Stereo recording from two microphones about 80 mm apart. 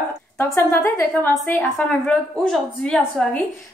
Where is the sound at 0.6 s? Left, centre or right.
Left.